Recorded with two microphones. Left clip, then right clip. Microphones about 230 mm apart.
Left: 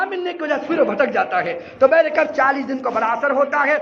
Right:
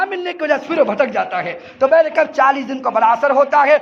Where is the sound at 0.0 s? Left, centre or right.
Right.